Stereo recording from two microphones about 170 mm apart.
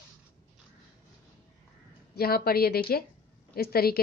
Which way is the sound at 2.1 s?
65° left (ahead or behind).